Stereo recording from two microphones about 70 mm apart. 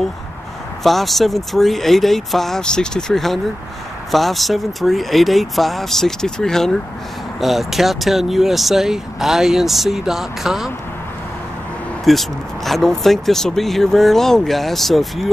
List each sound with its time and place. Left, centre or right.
0.8 s speech: centre
12.0 s speech: centre